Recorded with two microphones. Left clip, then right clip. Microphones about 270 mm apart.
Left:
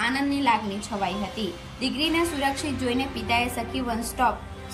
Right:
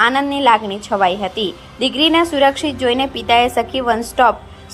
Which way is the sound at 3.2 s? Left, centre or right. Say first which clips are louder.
Right 13 dB; right.